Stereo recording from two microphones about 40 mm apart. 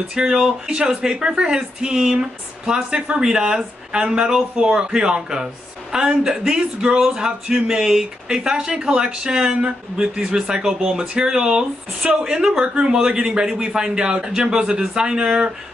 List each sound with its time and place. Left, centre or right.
0.1 s speech: right